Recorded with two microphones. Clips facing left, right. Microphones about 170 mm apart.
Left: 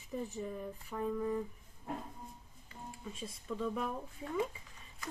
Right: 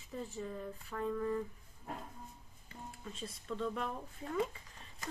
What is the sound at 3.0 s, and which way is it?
Speech, 10° left (ahead or behind).